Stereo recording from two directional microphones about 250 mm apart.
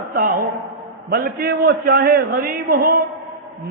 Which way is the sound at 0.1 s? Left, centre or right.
Right.